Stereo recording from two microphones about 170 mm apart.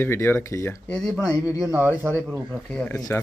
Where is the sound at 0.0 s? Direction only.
15° left (ahead or behind).